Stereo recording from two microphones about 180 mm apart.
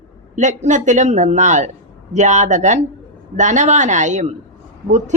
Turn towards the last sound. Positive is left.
turn(degrees=-40)  # may be behind; listen again after turning